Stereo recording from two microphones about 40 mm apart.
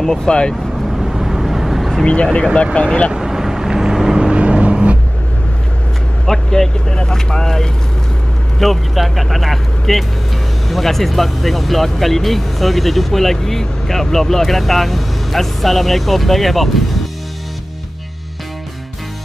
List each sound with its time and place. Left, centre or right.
0.0 s speech: centre
0.9 s vehicle: centre
2.5 s speech: left
3.1 s vehicle: centre
4.3 s vehicle: right
6.2 s speech: centre
8.5 s speech: centre